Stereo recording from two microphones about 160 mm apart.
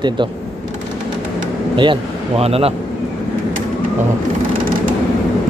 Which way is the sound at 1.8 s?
35° right (ahead or behind).